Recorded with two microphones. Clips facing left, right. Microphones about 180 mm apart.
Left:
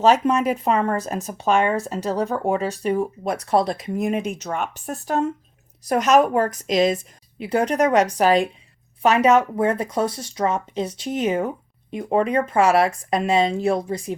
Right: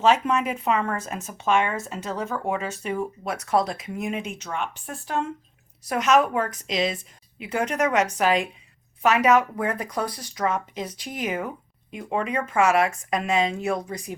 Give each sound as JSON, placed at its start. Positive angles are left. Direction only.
{"t": 0.0, "sound": "speech", "side_deg": 40}